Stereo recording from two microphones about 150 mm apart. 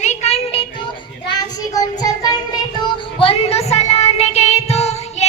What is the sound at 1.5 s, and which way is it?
Child singing, 25° left (ahead or behind).